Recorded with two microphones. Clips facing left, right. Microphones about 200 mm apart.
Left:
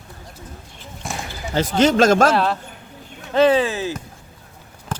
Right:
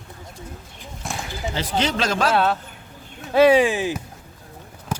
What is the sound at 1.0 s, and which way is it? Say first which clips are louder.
Basketball bounce: left 1 dB; centre (ahead or behind).